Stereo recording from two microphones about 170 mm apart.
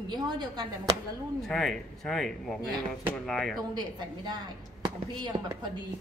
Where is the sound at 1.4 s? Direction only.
Centre (ahead or behind).